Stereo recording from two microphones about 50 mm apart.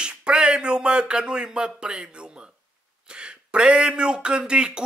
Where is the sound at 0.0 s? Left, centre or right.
Centre.